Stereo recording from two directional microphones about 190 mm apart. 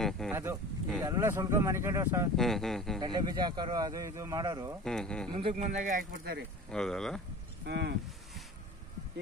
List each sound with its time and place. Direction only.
0.3 s speech: 15° right (ahead or behind)
2.3 s speech: centre (ahead or behind)
3.0 s speech: 20° right (ahead or behind)
4.8 s speech: 5° left (ahead or behind)
5.3 s speech: 30° right (ahead or behind); by 6.4 s 50° right (ahead or behind)
6.7 s speech: 5° left (ahead or behind)
7.6 s speech: 60° right (ahead or behind)